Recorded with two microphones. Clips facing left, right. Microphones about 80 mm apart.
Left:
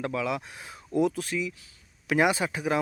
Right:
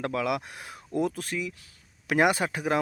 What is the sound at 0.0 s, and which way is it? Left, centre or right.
Speech, right.